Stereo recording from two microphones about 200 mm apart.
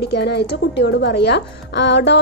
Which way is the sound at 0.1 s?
55° left (ahead or behind).